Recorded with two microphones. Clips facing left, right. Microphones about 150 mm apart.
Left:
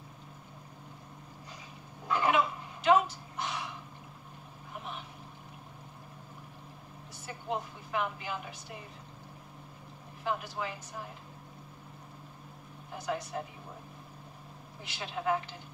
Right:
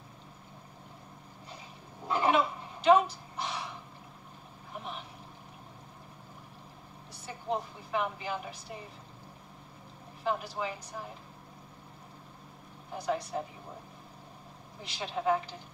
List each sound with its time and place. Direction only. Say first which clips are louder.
2.0 s fowl: right 1 dB; 30° right (ahead or behind)
2.9 s a sound: right 2 dB; centre (ahead or behind)
7.2 s a woman's voice: right 2 dB; centre (ahead or behind)
10.2 s a woman's voice: right 2 dB; centre (ahead or behind)
12.9 s a woman's voice: right 3 dB; centre (ahead or behind)
14.8 s a woman's voice: right 3 dB; centre (ahead or behind)